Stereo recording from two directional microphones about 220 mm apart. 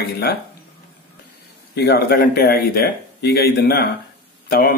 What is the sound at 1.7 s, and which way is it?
Speech, 50° left (ahead or behind).